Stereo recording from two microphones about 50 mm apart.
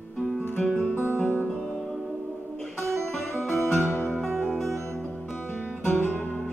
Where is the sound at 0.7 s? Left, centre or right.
Left.